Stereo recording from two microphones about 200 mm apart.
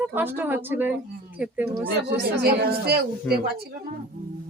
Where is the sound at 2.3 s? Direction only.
55° right (ahead or behind).